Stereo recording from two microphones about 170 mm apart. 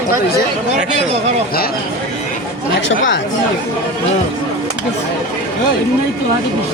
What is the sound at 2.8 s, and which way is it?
Speech, 90° left.